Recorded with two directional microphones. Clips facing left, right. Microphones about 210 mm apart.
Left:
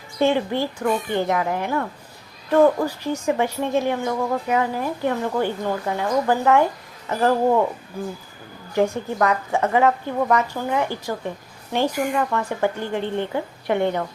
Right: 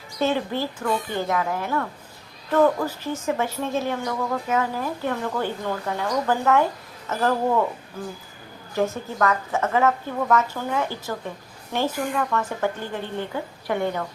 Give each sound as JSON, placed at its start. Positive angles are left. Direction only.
{"t": 0.2, "sound": "a woman's voice", "side_deg": 15}
{"t": 8.8, "sound": "a woman's voice", "side_deg": 15}